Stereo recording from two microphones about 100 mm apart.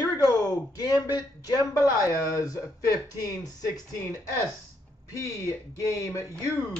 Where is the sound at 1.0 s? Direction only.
40° left (ahead or behind).